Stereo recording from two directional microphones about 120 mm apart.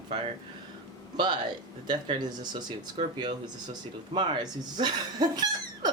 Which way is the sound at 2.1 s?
35° right (ahead or behind).